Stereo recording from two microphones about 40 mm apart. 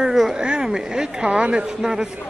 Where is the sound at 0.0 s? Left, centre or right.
Centre.